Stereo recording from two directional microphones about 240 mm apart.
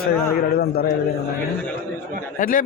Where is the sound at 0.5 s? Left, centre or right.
Left.